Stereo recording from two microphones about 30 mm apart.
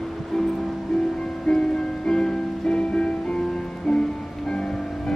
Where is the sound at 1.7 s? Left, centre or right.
Left.